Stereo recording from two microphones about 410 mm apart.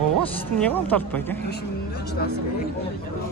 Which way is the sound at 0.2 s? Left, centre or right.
Centre.